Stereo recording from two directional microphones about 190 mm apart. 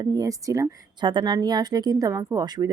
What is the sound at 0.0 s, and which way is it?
A woman's voice, 20° right (ahead or behind).